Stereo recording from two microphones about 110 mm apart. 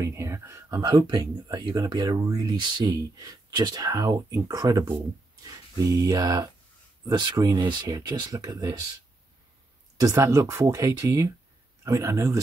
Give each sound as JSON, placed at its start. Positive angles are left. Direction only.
{"t": 0.0, "sound": "speech", "side_deg": -25}
{"t": 0.8, "sound": "speech", "side_deg": -40}
{"t": 9.9, "sound": "speech", "side_deg": -30}